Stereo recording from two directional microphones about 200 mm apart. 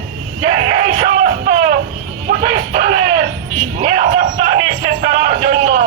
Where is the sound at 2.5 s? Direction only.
45° right (ahead or behind).